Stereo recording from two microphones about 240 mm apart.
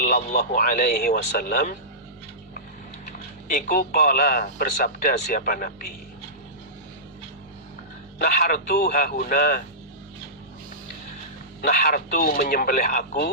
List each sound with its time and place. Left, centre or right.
0.0 s speech: left
3.1 s speech: left
8.2 s speech: left
11.7 s speech: left